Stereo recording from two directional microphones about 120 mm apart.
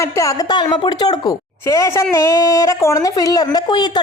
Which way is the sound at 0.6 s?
40° left (ahead or behind).